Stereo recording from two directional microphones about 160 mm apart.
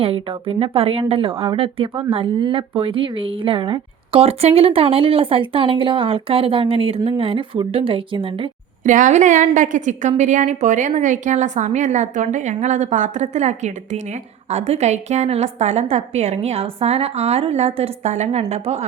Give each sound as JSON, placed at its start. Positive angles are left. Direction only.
{"t": 0.0, "sound": "a woman's voice", "side_deg": -35}
{"t": 8.8, "sound": "a woman's voice", "side_deg": -50}